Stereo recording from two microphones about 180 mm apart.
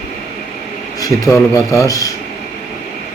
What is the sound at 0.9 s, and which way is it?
Speech, 20° left (ahead or behind).